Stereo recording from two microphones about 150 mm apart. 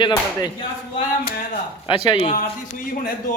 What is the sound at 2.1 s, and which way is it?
Speech, 35° left (ahead or behind).